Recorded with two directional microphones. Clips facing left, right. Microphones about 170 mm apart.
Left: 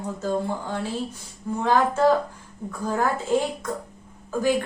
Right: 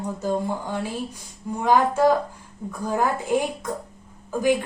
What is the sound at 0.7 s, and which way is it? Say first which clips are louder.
A woman's voice: even; 10° right (ahead or behind).